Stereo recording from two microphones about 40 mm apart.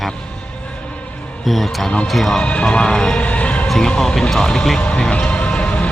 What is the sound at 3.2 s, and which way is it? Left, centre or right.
Music, left.